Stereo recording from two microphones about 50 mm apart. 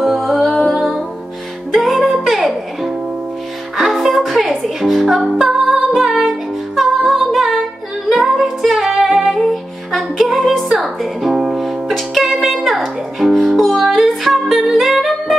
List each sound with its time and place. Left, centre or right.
0.0 s music: centre
0.7 s music: centre
1.7 s music: centre